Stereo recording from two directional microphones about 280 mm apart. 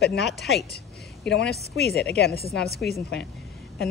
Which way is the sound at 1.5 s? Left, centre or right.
Left.